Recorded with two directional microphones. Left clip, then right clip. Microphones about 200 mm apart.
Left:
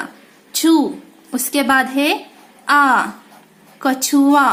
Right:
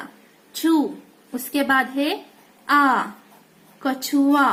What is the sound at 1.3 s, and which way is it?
A woman's voice, 20° left (ahead or behind).